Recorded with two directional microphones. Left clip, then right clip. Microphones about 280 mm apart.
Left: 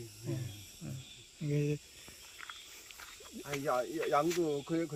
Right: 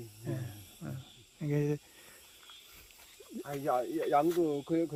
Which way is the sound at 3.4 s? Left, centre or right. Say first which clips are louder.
Right 2 dB; right.